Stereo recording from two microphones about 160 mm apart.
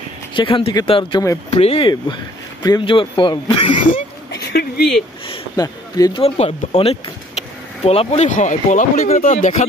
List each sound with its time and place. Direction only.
0.3 s speech: 30° left (ahead or behind)
4.3 s a sound: 90° left
5.6 s speech: 25° left (ahead or behind)
6.2 s speech: 40° left (ahead or behind)